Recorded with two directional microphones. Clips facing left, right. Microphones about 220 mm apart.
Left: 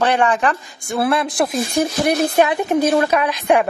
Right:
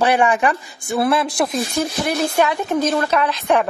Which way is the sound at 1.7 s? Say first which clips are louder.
Left 5 dB; 15° left (ahead or behind).